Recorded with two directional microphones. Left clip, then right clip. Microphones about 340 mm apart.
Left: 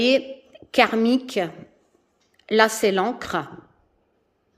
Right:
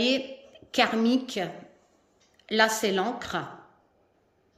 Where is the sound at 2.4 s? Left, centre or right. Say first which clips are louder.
Left 5 dB; centre.